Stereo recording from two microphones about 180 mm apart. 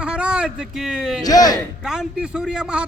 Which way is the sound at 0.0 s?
5° right (ahead or behind).